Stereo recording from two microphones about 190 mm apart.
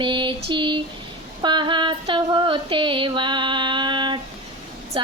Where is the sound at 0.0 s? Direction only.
25° right (ahead or behind).